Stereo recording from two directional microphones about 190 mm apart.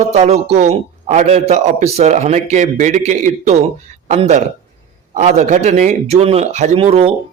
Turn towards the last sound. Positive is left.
turn(degrees=-30)  # may be behind; listen again after turning